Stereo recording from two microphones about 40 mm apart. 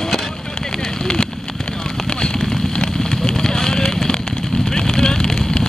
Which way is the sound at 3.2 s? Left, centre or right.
Centre.